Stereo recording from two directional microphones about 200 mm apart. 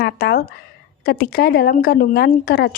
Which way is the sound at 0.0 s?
50° left (ahead or behind).